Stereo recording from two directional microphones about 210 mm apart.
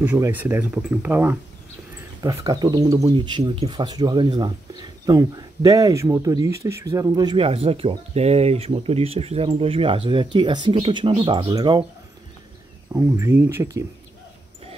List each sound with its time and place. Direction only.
0.0 s speech: 10° right (ahead or behind)
12.9 s speech: 10° right (ahead or behind)